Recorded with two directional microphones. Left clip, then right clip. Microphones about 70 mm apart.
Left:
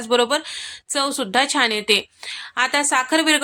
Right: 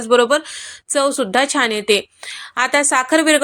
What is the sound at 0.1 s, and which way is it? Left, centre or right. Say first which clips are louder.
A woman's voice: right 5 dB; right.